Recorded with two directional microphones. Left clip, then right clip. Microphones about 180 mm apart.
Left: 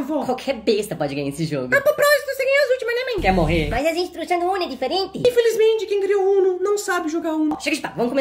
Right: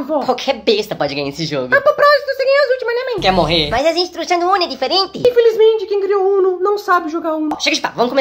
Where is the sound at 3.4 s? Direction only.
10° left (ahead or behind).